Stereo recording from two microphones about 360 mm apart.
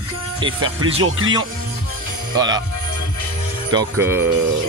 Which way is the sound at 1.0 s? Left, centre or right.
Right.